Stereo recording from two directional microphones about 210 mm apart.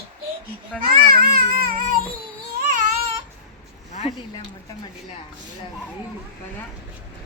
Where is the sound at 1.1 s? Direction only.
45° right (ahead or behind).